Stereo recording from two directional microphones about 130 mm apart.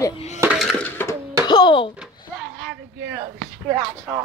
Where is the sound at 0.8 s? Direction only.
20° left (ahead or behind).